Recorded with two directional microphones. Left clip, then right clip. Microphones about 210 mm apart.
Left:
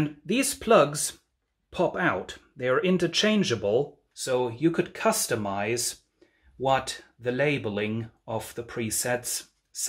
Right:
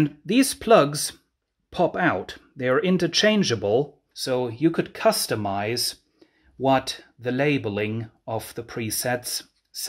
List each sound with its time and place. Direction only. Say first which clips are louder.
0.0 s speech: right 5 dB; 45° right (ahead or behind)